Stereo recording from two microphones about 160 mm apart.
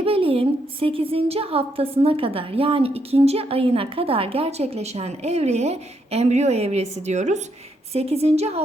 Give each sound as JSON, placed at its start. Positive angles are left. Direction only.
{"t": 0.0, "sound": "a woman's voice", "side_deg": -35}